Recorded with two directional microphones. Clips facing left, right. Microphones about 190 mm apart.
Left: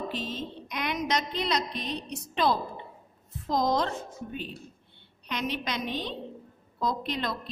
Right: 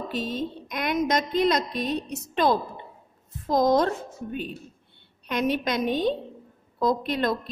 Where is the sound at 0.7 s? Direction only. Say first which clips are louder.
Right 5 dB; 45° right (ahead or behind).